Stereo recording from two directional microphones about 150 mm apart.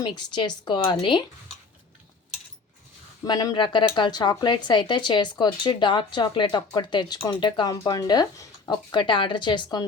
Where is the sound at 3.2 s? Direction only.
25° left (ahead or behind).